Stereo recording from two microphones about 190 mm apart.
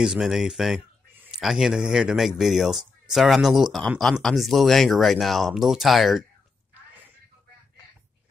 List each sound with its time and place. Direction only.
0.0 s speech: 5° right (ahead or behind)